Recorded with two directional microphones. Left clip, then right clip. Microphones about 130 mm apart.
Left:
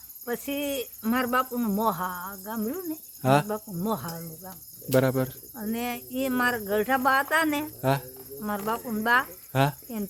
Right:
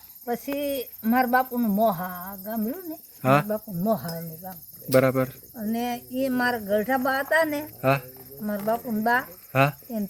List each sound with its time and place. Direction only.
0.3 s speech: 20° left (ahead or behind)
3.5 s speech: 15° left (ahead or behind)
4.4 s speech: 25° left (ahead or behind)
5.5 s speech: 15° left (ahead or behind)